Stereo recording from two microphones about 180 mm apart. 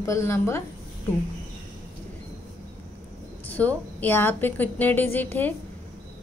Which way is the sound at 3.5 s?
10° left (ahead or behind).